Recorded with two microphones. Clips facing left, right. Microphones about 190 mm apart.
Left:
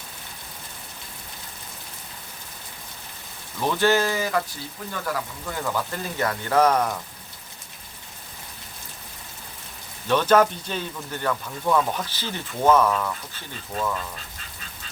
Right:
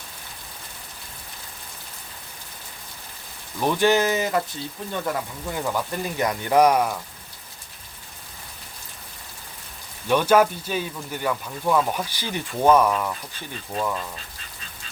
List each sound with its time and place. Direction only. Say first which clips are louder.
3.6 s speech: right 2 dB; 15° right (ahead or behind)
10.1 s speech: right 1 dB; 10° right (ahead or behind)